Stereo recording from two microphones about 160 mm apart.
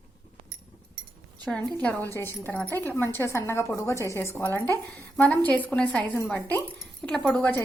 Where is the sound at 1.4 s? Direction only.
10° left (ahead or behind).